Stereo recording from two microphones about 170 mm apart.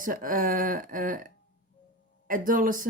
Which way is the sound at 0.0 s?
50° right (ahead or behind).